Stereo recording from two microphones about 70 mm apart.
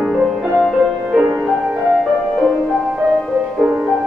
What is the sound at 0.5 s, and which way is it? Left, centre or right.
Music, centre.